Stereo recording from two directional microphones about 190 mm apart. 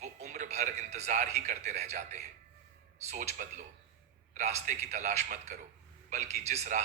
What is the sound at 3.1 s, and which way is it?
A man's voice, 40° right (ahead or behind).